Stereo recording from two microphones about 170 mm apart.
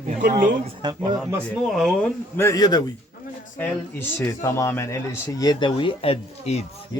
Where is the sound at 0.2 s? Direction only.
55° right (ahead or behind).